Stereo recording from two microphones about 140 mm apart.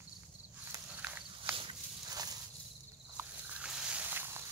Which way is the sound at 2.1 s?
25° right (ahead or behind).